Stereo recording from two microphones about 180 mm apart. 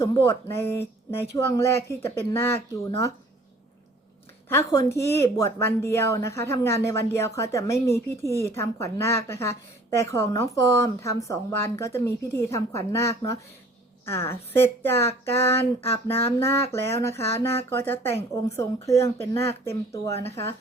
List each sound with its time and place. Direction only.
0.0 s a woman's voice: 15° left (ahead or behind)
4.4 s a woman's voice: 15° left (ahead or behind)
8.2 s speech: 20° right (ahead or behind)
8.4 s a woman's voice: 15° left (ahead or behind)
17.2 s speech: 35° left (ahead or behind)
17.6 s a woman's voice: 10° left (ahead or behind)